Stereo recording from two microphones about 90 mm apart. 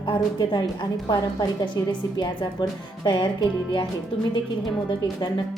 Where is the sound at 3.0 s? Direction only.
60° left (ahead or behind).